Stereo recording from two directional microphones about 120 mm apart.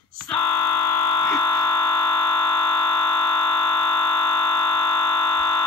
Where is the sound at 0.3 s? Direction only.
20° left (ahead or behind).